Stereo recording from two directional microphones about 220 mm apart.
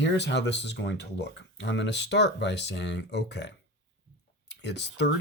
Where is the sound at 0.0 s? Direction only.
55° left (ahead or behind).